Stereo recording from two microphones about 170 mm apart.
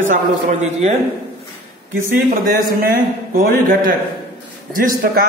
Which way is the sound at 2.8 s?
60° right (ahead or behind).